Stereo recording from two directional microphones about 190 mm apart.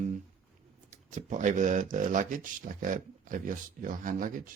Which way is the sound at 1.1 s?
40° right (ahead or behind).